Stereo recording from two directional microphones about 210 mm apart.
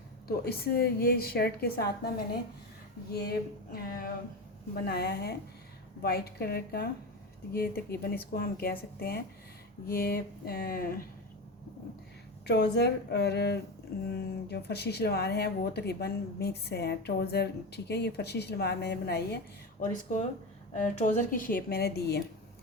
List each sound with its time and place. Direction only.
0.3 s speech: 50° left (ahead or behind)
3.2 s a sound: 45° left (ahead or behind)
4.9 s speech: 50° left (ahead or behind)
12.5 s speech: 55° left (ahead or behind)
19.8 s a woman's voice: 35° left (ahead or behind)